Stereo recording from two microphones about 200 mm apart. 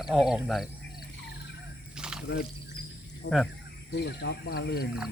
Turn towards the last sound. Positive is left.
turn(degrees=50)  # may be behind; listen again after turning